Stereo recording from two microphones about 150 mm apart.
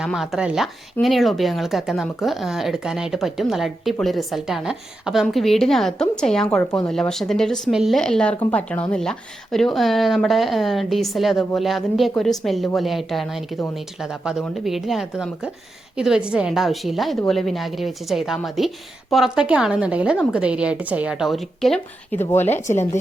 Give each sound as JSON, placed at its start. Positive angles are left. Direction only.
{"t": 0.0, "sound": "a woman's voice", "side_deg": 0}
{"t": 22.2, "sound": "a woman's voice", "side_deg": 15}